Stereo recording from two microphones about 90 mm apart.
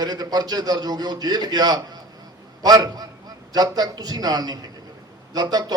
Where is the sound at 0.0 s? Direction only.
50° right (ahead or behind).